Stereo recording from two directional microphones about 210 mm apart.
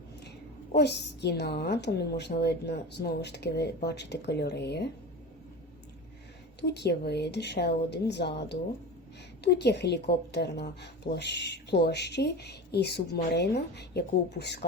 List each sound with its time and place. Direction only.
0.7 s a woman's voice: 50° left (ahead or behind)
6.6 s a woman's voice: 50° left (ahead or behind)